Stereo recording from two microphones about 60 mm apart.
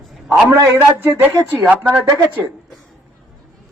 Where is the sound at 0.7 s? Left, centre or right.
Right.